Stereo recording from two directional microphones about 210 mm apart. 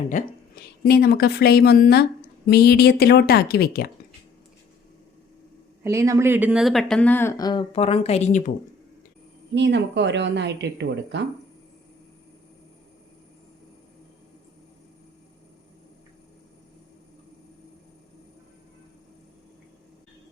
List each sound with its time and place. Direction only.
0.1 s speech: 40° left (ahead or behind)
5.8 s speech: 15° right (ahead or behind); by 8.5 s 35° left (ahead or behind)
9.6 s speech: 55° right (ahead or behind)